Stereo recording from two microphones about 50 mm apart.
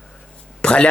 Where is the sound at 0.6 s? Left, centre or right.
Left.